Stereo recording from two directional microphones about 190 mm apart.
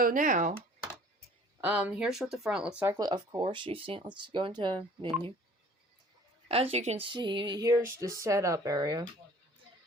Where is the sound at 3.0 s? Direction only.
20° right (ahead or behind).